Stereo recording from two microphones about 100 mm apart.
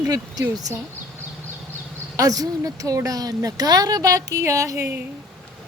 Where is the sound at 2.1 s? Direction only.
35° right (ahead or behind).